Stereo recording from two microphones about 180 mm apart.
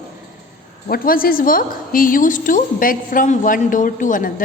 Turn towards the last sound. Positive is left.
turn(degrees=50)  # may be behind; listen again after turning